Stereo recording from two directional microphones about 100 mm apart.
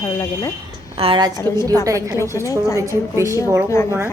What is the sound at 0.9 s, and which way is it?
Speech, 70° right (ahead or behind).